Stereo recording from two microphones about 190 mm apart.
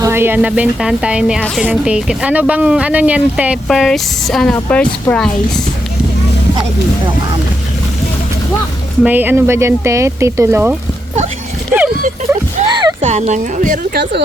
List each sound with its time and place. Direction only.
0.0 s speech: 10° right (ahead or behind); by 5.3 s 5° left (ahead or behind)
9.0 s speech: 10° right (ahead or behind)
12.6 s a sound: 25° right (ahead or behind)
13.1 s speech: 35° right (ahead or behind)
13.9 s speech: 60° right (ahead or behind)